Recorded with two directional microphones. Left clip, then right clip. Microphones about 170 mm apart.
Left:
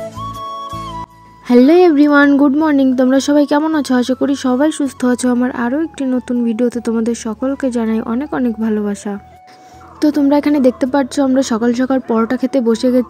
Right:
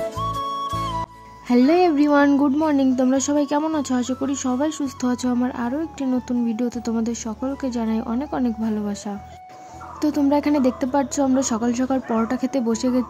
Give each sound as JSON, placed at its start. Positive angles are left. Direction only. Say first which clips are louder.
{"t": 0.2, "sound": "music", "louder": "left 1 dB", "side_deg": 0}
{"t": 1.5, "sound": "speech", "louder": "left 8 dB", "side_deg": 25}
{"t": 2.6, "sound": "speech", "louder": "left 7 dB", "side_deg": 30}